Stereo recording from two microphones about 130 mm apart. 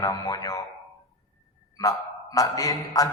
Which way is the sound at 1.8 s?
25° left (ahead or behind).